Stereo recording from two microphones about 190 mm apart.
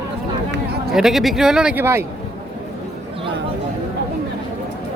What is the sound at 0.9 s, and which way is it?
Speech, centre (ahead or behind).